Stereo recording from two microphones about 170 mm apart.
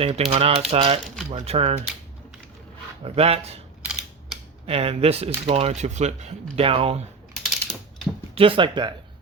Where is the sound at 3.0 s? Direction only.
35° right (ahead or behind).